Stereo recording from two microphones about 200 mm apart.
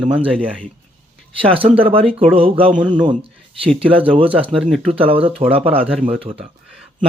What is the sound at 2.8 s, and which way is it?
Speech, 5° right (ahead or behind).